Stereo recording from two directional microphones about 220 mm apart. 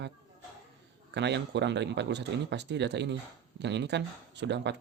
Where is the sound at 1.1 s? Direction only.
50° right (ahead or behind).